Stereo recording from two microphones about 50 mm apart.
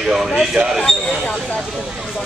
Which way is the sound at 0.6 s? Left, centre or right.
Right.